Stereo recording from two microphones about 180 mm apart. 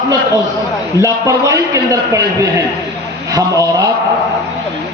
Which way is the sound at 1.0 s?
20° right (ahead or behind).